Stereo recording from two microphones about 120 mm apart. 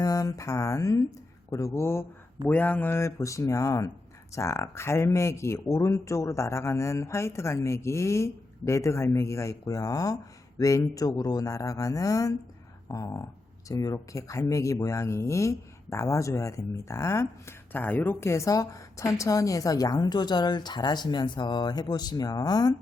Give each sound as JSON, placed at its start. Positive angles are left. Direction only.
{"t": 0.0, "sound": "speech", "side_deg": 30}